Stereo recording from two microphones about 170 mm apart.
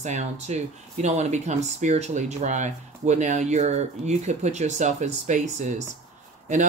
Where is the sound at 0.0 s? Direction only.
45° right (ahead or behind).